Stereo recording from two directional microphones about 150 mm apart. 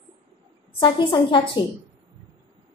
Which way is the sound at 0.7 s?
35° left (ahead or behind).